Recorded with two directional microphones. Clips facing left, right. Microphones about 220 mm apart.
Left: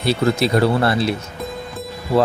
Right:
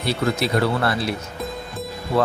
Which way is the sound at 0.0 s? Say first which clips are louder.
Left 4 dB; 30° left (ahead or behind).